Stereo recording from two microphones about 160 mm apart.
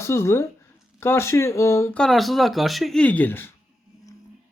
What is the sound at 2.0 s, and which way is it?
Speech, centre (ahead or behind).